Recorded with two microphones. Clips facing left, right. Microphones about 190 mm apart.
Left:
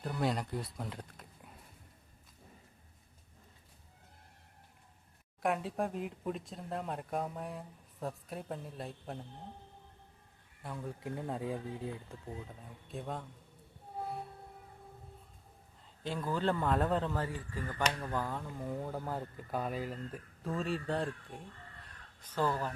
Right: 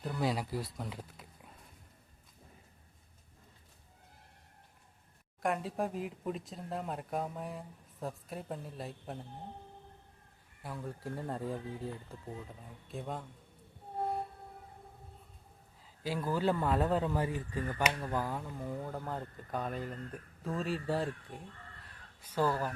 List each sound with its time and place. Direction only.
0.0 s speech: centre (ahead or behind)
5.4 s speech: centre (ahead or behind)
10.6 s speech: centre (ahead or behind)
16.0 s speech: 10° right (ahead or behind)
18.5 s speech: centre (ahead or behind)